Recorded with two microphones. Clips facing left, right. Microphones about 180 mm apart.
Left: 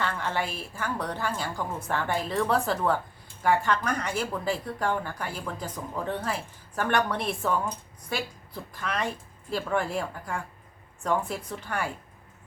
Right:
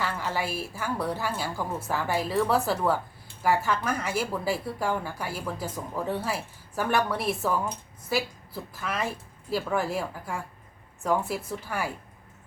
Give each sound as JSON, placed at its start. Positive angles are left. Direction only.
{"t": 0.0, "sound": "a woman's voice", "side_deg": -5}